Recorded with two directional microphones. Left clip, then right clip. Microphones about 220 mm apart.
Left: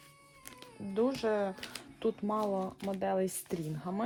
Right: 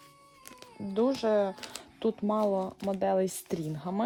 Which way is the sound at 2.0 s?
45° right (ahead or behind).